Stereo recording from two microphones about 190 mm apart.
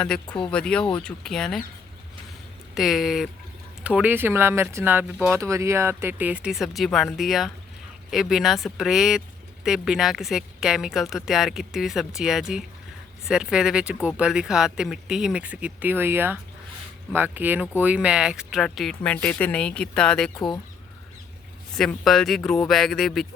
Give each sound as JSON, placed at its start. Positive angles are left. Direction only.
{"t": 0.0, "sound": "speech", "side_deg": 5}
{"t": 2.7, "sound": "speech", "side_deg": 0}
{"t": 20.3, "sound": "speech", "side_deg": 25}
{"t": 21.7, "sound": "speech", "side_deg": 5}